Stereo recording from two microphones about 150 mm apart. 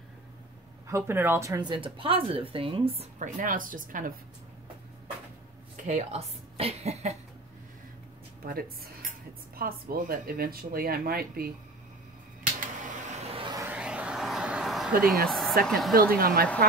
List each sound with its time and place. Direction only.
0.8 s speech: 15° right (ahead or behind); by 3.1 s 40° right (ahead or behind)
3.2 s speech: 65° right (ahead or behind)
5.9 s speech: 45° right (ahead or behind)
9.6 s speech: 80° right
12.5 s finger snapping: 55° right (ahead or behind)
13.4 s a sound: 30° right (ahead or behind)
13.7 s a sound: 5° right (ahead or behind)
15.2 s a woman's voice: centre (ahead or behind)
15.9 s speech: 75° right (ahead or behind)